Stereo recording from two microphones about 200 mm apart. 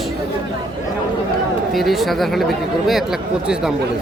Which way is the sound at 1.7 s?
Centre (ahead or behind).